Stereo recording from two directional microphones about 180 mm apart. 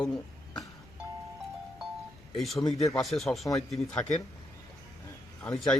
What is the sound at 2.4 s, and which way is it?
Speech, centre (ahead or behind).